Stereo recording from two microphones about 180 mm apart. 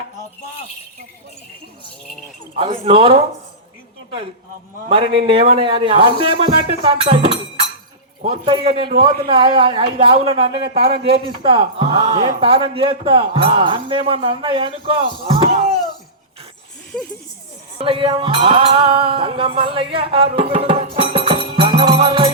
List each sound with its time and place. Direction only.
2.8 s a man's voice: 30° right (ahead or behind)
4.9 s a man's voice: 30° right (ahead or behind)
16.9 s speech: 5° left (ahead or behind)
17.7 s music: 30° right (ahead or behind)